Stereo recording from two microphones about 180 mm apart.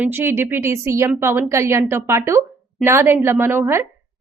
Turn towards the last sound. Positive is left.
turn(degrees=-15)  # may be behind; listen again after turning